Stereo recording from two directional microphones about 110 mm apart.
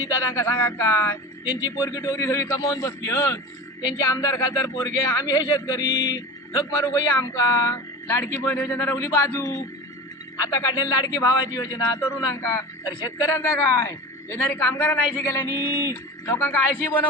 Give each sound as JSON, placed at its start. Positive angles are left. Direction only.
{"t": 0.3, "sound": "a man's voice", "side_deg": 25}
{"t": 1.6, "sound": "a man's voice", "side_deg": 30}
{"t": 10.4, "sound": "a man's voice", "side_deg": 35}
{"t": 12.8, "sound": "a man's voice", "side_deg": 35}
{"t": 15.4, "sound": "a sound", "side_deg": -20}
{"t": 16.2, "sound": "a man's voice", "side_deg": 20}